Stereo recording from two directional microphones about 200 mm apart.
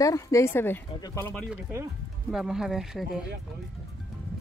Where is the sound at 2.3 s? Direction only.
Centre (ahead or behind).